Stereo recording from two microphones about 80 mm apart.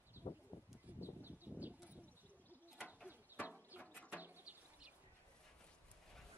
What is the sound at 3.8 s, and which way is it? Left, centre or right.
Bird, centre.